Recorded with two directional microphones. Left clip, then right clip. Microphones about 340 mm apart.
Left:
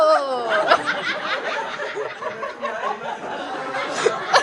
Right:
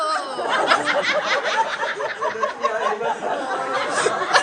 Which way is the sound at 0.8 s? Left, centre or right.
Right.